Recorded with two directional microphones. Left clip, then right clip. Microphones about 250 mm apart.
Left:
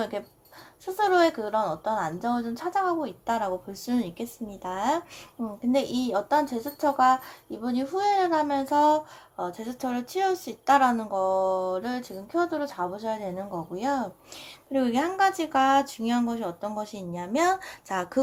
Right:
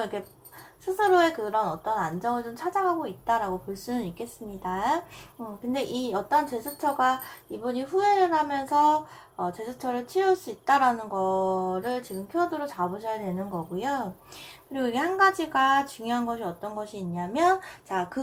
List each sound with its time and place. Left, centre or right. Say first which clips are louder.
0.1 s a woman's voice: left 1 dB; left